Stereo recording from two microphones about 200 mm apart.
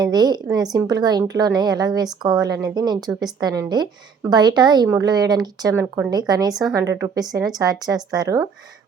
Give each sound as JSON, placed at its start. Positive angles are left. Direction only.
{"t": 0.0, "sound": "a woman's voice", "side_deg": -20}